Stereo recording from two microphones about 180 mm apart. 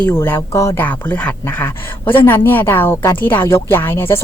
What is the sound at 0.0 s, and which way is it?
Speech, 10° left (ahead or behind).